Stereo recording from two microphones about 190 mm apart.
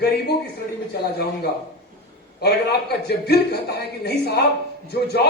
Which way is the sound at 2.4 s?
60° left (ahead or behind).